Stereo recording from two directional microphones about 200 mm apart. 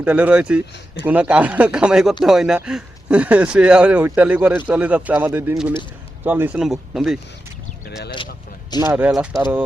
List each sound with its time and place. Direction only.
0.0 s speech: 5° right (ahead or behind)
8.8 s speech: 10° right (ahead or behind)